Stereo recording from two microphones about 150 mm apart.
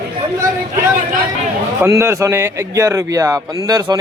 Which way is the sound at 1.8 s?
20° right (ahead or behind).